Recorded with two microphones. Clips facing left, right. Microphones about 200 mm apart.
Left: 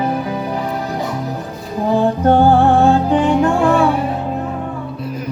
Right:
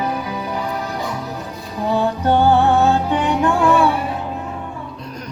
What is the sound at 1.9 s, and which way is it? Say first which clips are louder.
Music: left 4 dB; 45° left (ahead or behind).